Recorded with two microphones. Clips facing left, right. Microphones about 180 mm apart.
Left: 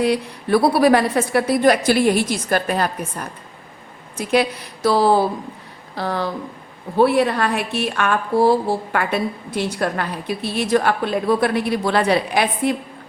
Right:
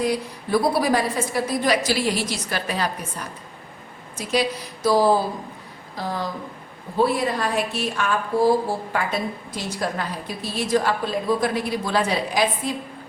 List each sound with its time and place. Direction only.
0.0 s a woman's voice: 65° left (ahead or behind)